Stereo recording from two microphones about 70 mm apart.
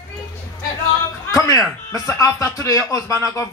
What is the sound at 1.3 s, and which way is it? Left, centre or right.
Speech, left.